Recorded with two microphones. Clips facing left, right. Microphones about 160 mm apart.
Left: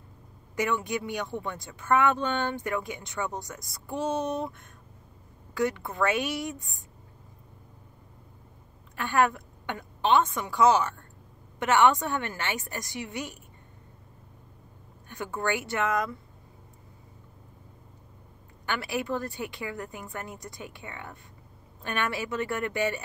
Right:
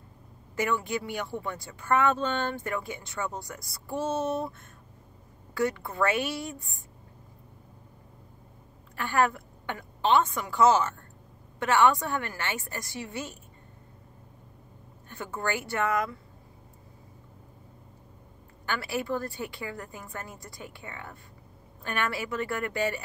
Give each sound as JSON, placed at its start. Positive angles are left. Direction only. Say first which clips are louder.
{"t": 0.6, "sound": "a woman's voice", "louder": "even", "side_deg": 20}
{"t": 8.9, "sound": "a woman's voice", "louder": "left 1 dB", "side_deg": 20}
{"t": 15.0, "sound": "a woman's voice", "louder": "left 2 dB", "side_deg": 15}
{"t": 18.7, "sound": "a woman's voice", "louder": "even", "side_deg": 15}